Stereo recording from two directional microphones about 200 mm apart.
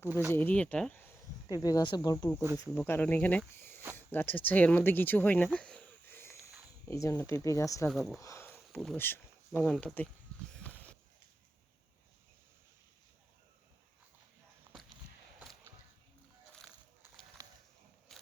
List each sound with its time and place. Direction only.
0.1 s speech: 10° right (ahead or behind)
0.3 s speech: 5° left (ahead or behind)
1.5 s speech: 20° left (ahead or behind)
5.5 s wheeze: 5° left (ahead or behind)
6.8 s speech: 15° left (ahead or behind)
7.9 s speech: centre (ahead or behind)
8.2 s sniff: 15° left (ahead or behind)
9.7 s speech: 5° left (ahead or behind)
10.5 s a sound: 5° left (ahead or behind)
18.1 s mechanisms: centre (ahead or behind)